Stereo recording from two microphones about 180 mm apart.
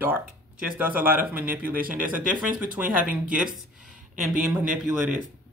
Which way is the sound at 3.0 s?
10° right (ahead or behind).